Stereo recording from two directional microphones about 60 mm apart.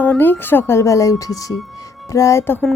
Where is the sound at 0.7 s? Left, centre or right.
Left.